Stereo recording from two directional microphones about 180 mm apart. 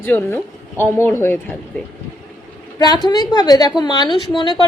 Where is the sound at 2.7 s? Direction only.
20° left (ahead or behind).